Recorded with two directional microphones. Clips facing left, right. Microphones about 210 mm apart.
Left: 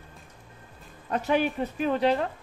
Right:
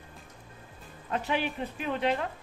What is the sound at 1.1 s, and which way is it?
A woman's voice, 45° left (ahead or behind).